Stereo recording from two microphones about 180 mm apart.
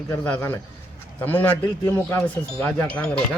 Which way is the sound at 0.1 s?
10° left (ahead or behind).